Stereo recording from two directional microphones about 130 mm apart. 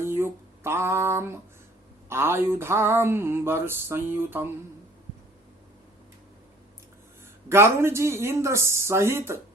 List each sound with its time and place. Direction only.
0.0 s speech: 20° right (ahead or behind)
2.0 s a sound: 20° right (ahead or behind)
7.5 s speech: 20° right (ahead or behind)